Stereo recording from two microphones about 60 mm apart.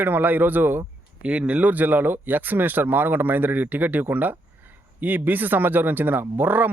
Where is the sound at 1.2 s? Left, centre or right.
Right.